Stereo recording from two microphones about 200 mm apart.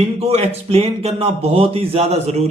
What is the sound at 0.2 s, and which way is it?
Speech, 30° right (ahead or behind).